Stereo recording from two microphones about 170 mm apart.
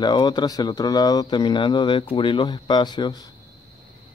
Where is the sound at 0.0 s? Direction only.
25° left (ahead or behind).